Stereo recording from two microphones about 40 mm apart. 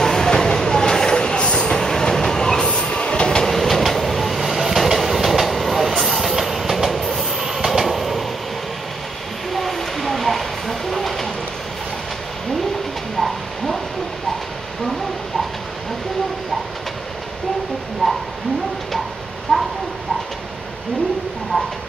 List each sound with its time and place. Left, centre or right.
0.0 s train: centre
1.8 s train: centre
3.4 s train: centre
9.5 s train: centre
18.0 s a sound: centre
19.5 s a sound: centre